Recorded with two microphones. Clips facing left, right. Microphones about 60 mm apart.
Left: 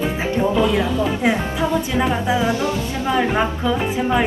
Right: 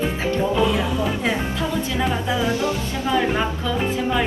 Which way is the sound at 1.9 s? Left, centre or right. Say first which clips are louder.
Left 3 dB; centre.